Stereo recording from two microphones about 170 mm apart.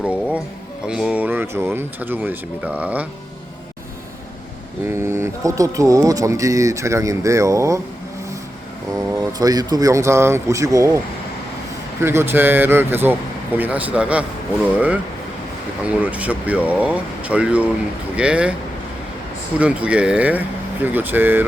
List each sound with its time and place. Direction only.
0.0 s speech: 5° right (ahead or behind)
4.9 s speech: 15° right (ahead or behind)
9.0 s speech: 20° right (ahead or behind)
19.5 s speech: 5° right (ahead or behind)